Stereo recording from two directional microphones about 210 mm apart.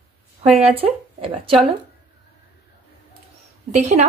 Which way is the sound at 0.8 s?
25° right (ahead or behind).